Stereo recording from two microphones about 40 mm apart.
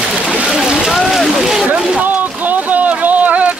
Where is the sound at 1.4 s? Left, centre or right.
Centre.